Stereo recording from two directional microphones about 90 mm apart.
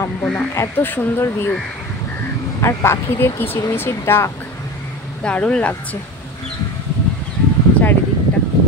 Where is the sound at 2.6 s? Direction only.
30° left (ahead or behind).